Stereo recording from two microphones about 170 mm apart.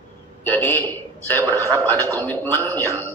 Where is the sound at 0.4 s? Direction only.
10° left (ahead or behind).